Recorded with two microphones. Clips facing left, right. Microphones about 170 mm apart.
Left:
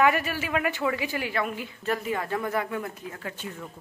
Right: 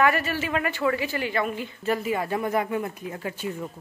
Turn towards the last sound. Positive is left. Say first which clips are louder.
# right 4 dB
turn(degrees=-20)  # may be behind; listen again after turning